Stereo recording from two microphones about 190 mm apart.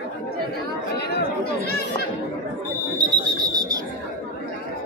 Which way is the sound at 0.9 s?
60° left (ahead or behind).